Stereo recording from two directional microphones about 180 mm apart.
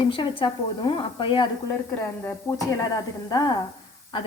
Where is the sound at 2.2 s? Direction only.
15° left (ahead or behind).